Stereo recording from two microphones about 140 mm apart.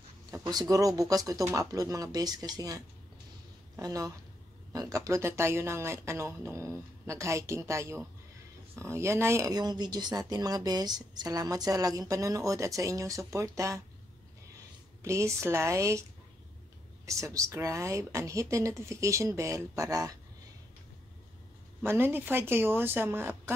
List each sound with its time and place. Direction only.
0.3 s speech: 30° right (ahead or behind)
3.8 s speech: 25° right (ahead or behind)
15.0 s speech: 20° right (ahead or behind)
21.8 s speech: 15° right (ahead or behind)